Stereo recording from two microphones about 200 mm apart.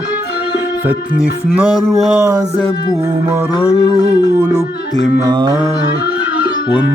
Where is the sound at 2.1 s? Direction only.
15° right (ahead or behind).